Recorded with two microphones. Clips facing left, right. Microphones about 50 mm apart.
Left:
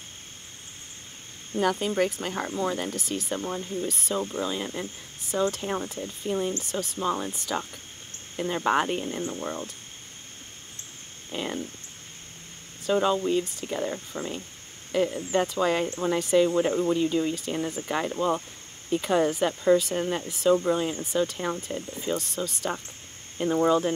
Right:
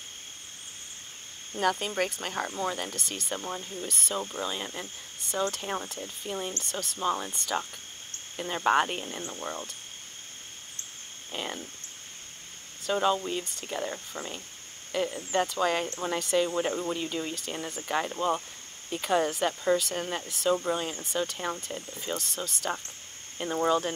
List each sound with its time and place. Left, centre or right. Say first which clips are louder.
1.6 s speech: left 3 dB; centre
6.6 s speech: left 2 dB; centre
11.2 s speech: left 4 dB; centre
12.8 s speech: left 3 dB; centre